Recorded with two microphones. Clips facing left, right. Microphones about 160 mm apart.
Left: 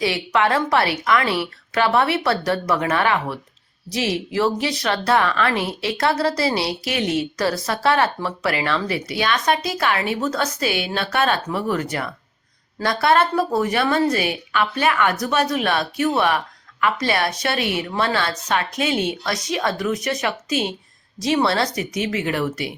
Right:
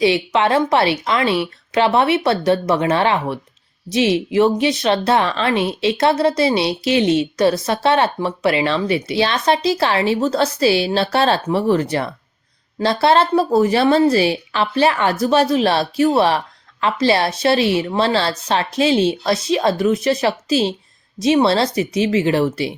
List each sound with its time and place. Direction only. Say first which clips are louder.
0.0 s speech: right 4 dB; 25° right (ahead or behind)